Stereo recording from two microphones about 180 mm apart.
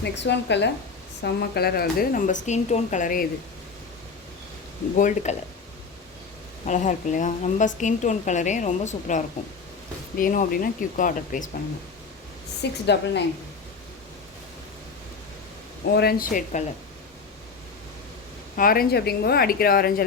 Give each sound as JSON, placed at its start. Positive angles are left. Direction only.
{"t": 0.0, "sound": "a woman's voice", "side_deg": 75}
{"t": 1.2, "sound": "speech", "side_deg": 60}
{"t": 4.9, "sound": "speech", "side_deg": 40}
{"t": 6.7, "sound": "a woman's voice", "side_deg": 45}
{"t": 12.8, "sound": "a woman's voice", "side_deg": 70}
{"t": 16.0, "sound": "speech", "side_deg": 55}
{"t": 18.5, "sound": "speech", "side_deg": 55}